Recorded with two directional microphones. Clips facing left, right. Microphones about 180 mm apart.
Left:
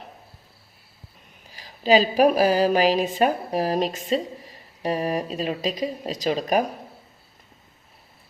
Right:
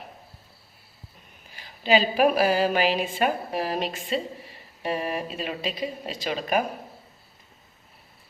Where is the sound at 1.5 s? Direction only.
35° left (ahead or behind).